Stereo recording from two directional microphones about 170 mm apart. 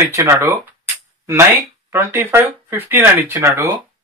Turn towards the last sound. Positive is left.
turn(degrees=-15)  # may be behind; listen again after turning